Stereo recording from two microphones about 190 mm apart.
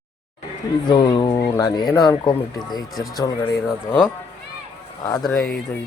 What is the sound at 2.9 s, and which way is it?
Speech, centre (ahead or behind).